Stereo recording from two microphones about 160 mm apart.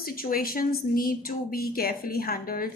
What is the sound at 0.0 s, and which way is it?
A woman's voice, 65° left (ahead or behind).